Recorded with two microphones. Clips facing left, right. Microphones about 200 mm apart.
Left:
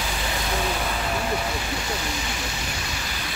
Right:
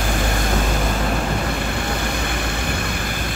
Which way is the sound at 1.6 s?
55° right (ahead or behind).